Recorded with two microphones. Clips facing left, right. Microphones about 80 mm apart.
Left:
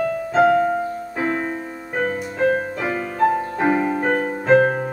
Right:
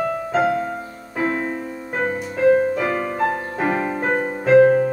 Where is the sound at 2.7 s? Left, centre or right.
Centre.